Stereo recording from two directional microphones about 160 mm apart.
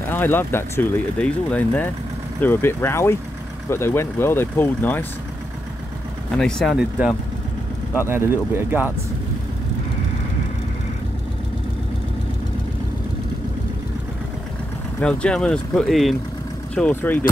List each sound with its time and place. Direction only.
0.1 s speech: 15° left (ahead or behind)
6.3 s speech: centre (ahead or behind)
15.0 s speech: 5° left (ahead or behind)